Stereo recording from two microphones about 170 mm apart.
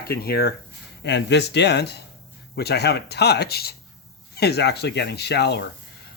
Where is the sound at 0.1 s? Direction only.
65° left (ahead or behind).